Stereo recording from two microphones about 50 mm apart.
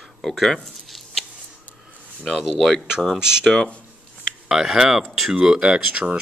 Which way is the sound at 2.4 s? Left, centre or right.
Centre.